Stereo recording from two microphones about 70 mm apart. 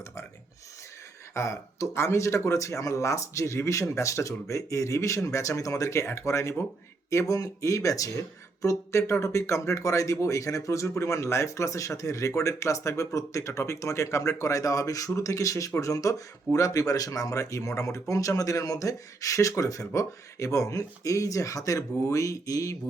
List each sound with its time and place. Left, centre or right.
1.3 s speech: left